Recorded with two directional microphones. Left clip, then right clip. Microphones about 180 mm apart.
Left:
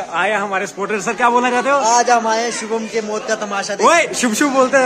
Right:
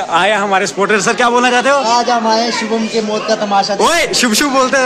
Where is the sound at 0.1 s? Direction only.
5° right (ahead or behind).